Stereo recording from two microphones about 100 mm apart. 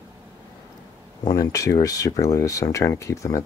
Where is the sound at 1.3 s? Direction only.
35° left (ahead or behind).